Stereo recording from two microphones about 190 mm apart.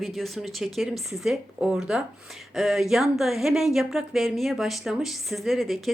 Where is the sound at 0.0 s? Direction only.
Centre (ahead or behind).